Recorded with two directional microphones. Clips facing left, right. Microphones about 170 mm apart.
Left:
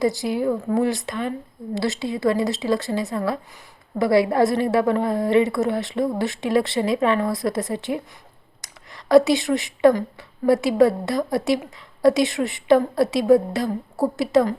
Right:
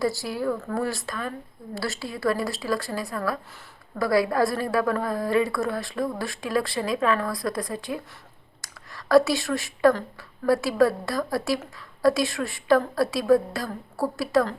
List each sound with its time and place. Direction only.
0.0 s a woman's voice: 20° left (ahead or behind)